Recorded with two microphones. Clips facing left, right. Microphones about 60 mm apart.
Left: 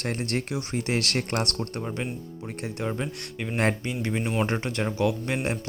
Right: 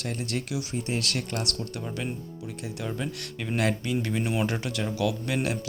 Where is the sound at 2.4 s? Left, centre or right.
Left.